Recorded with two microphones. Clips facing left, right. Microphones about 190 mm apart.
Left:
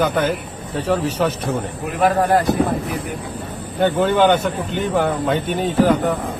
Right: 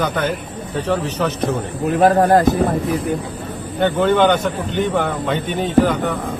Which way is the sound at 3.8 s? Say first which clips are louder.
Right 1 dB; 10° left (ahead or behind).